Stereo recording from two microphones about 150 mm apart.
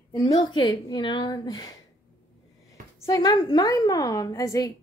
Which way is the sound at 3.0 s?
25° left (ahead or behind).